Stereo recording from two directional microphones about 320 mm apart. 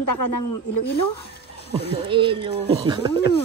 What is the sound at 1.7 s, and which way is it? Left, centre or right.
Speech, centre.